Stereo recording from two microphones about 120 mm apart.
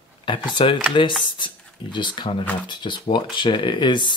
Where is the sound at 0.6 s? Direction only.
50° left (ahead or behind).